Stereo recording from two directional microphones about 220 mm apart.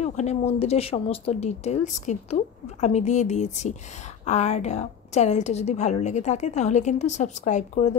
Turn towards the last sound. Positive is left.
turn(degrees=30)  # may be behind; listen again after turning